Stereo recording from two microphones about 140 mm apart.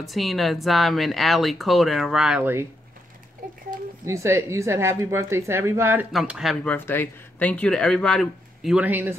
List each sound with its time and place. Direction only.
0.0 s speech: centre (ahead or behind)
4.0 s speech: 20° right (ahead or behind)
6.1 s speech: 5° right (ahead or behind)
6.6 s speech: 10° left (ahead or behind); by 9.1 s 10° right (ahead or behind)